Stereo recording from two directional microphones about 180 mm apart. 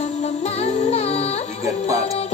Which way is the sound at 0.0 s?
35° left (ahead or behind).